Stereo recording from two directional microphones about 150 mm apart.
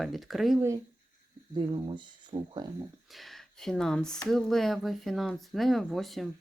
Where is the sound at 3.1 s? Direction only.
Centre (ahead or behind).